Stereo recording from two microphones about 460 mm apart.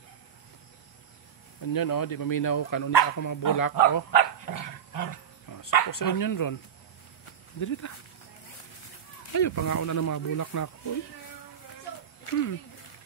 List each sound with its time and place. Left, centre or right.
1.6 s speech: left
7.6 s speech: left
9.3 s speech: left
12.3 s speech: left